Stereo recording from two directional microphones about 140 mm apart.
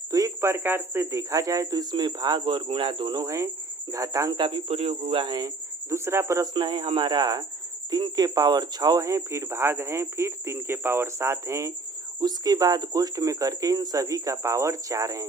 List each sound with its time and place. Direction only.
0.1 s speech: 25° right (ahead or behind)
5.9 s speech: 20° right (ahead or behind)